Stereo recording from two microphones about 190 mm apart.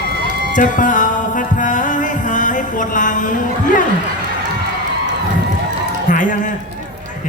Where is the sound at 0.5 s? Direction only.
45° left (ahead or behind).